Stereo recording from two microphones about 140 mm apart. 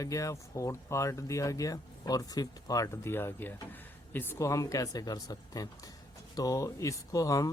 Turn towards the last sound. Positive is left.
turn(degrees=25)  # may be behind; listen again after turning